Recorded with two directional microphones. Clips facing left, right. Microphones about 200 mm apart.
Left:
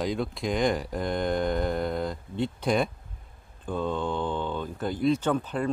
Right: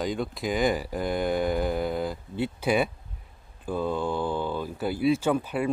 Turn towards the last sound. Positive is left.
turn(degrees=-10)  # may be behind; listen again after turning